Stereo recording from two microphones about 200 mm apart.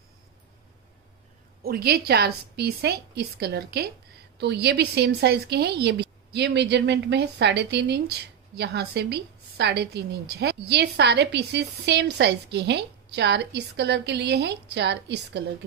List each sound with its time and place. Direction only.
1.6 s a woman's voice: 50° right (ahead or behind)